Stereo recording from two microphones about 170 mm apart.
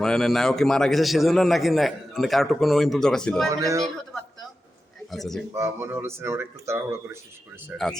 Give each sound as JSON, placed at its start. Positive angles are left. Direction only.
{"t": 0.0, "sound": "a man's voice", "side_deg": 0}
{"t": 3.5, "sound": "a man's voice", "side_deg": -20}
{"t": 5.1, "sound": "a man's voice", "side_deg": 0}
{"t": 5.5, "sound": "speech", "side_deg": -15}